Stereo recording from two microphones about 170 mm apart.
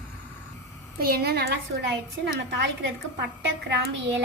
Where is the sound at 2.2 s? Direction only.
85° right.